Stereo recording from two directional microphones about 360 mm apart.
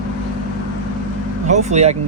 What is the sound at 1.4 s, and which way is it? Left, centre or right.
Speech, centre.